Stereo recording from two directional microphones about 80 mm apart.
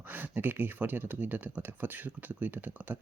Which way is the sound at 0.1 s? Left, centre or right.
Right.